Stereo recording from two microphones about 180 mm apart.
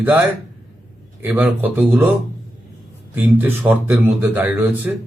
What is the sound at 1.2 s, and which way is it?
Speech, 5° right (ahead or behind).